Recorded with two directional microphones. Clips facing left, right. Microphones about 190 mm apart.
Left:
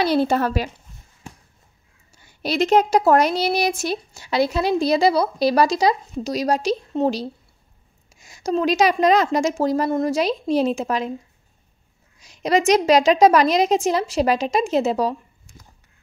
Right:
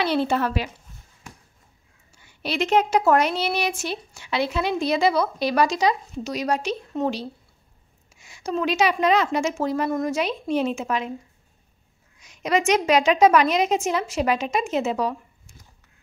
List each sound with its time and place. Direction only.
0.0 s a woman's voice: 40° left (ahead or behind)
2.1 s a woman's voice: 40° left (ahead or behind)
12.2 s a woman's voice: 35° left (ahead or behind)